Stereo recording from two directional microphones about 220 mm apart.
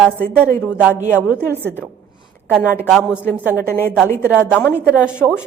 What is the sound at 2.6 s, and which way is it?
A woman's voice, 10° left (ahead or behind).